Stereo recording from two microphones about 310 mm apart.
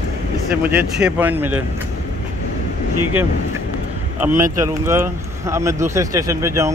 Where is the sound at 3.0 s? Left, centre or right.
Right.